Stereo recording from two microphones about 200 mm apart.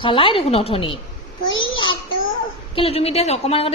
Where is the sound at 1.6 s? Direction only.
25° left (ahead or behind).